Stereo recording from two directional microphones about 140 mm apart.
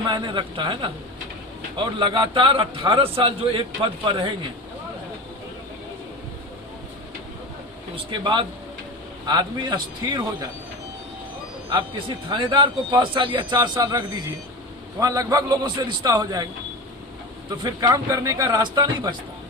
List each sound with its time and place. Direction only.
0.0 s a man's voice: 30° right (ahead or behind)
8.1 s a man's voice: 35° right (ahead or behind)
11.7 s a man's voice: 35° right (ahead or behind)
17.6 s a man's voice: 25° right (ahead or behind)